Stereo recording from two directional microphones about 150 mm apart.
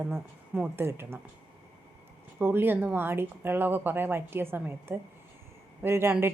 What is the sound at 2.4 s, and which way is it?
Speech, 15° right (ahead or behind).